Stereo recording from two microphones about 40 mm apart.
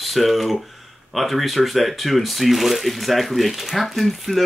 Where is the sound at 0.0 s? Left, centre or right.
Centre.